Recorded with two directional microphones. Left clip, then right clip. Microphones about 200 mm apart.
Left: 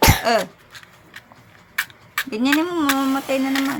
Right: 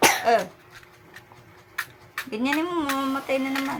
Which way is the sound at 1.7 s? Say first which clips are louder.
Left 8 dB; 50° left (ahead or behind).